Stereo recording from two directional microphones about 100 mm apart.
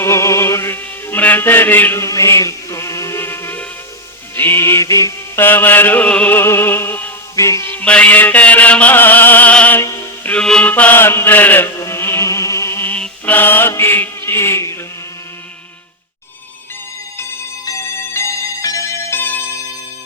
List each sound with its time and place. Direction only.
0.0 s music: 30° left (ahead or behind)
5.4 s music: 20° left (ahead or behind)
7.3 s music: 30° left (ahead or behind)
7.7 s music: 15° left (ahead or behind)
9.8 s music: 30° left (ahead or behind)
10.2 s mantra: 10° left (ahead or behind)
11.8 s music: 25° left (ahead or behind)
13.0 s chant: 15° left (ahead or behind)
17.7 s music: 30° left (ahead or behind)
19.2 s music: 20° left (ahead or behind)